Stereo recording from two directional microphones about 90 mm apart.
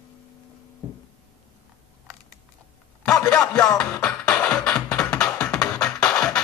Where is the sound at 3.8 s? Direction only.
10° left (ahead or behind).